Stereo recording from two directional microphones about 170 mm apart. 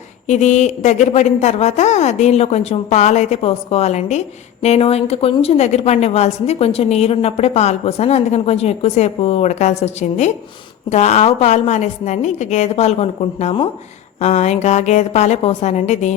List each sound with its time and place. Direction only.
0.3 s a woman's voice: 45° left (ahead or behind)